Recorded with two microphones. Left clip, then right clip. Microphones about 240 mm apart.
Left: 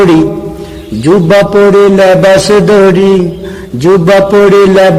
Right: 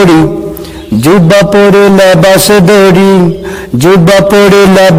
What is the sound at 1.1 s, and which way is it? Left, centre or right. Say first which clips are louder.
A man's voice: right 1 dB; right.